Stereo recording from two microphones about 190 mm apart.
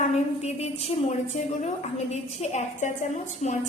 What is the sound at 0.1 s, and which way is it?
A woman's voice, 35° left (ahead or behind).